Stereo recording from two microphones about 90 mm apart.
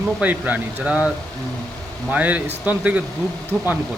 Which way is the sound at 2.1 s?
15° right (ahead or behind).